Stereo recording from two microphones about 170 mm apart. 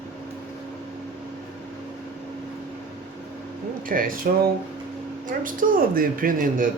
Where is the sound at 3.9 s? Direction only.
55° right (ahead or behind).